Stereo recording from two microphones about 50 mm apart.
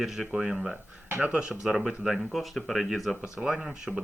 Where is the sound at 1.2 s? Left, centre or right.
Right.